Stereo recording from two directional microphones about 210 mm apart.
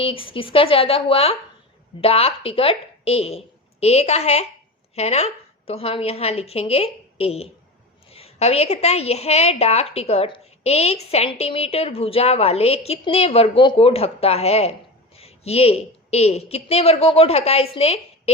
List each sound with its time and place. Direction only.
0.0 s a woman's voice: 25° left (ahead or behind)